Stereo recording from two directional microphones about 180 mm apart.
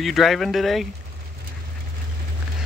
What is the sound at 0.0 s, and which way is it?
Speech, centre (ahead or behind).